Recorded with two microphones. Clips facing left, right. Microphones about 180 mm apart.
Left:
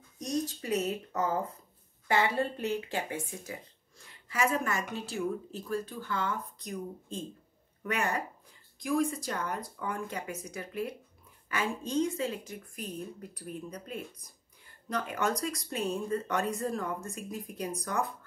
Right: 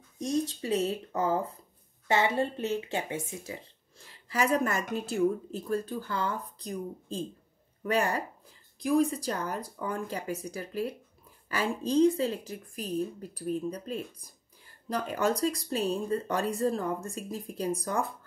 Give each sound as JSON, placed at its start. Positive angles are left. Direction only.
{"t": 0.2, "sound": "speech", "side_deg": -25}
{"t": 4.1, "sound": "a woman's voice", "side_deg": -35}